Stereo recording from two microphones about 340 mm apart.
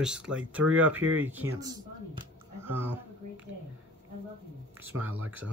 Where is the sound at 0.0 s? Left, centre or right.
Centre.